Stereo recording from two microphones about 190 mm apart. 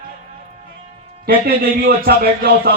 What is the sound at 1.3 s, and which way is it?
A man's voice, 55° right (ahead or behind).